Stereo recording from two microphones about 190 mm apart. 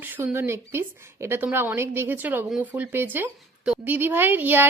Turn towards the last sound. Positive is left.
turn(degrees=-10)  # may be behind; listen again after turning